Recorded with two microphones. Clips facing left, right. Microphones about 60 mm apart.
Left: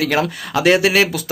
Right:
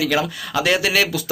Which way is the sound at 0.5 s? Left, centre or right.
Left.